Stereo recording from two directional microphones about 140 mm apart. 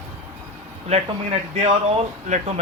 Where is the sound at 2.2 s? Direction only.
60° right (ahead or behind).